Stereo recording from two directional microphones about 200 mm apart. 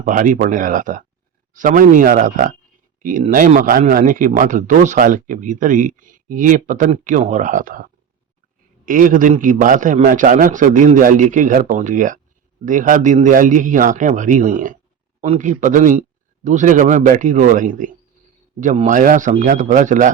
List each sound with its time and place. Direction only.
0.0 s speech: 40° right (ahead or behind)
8.9 s speech: 40° right (ahead or behind)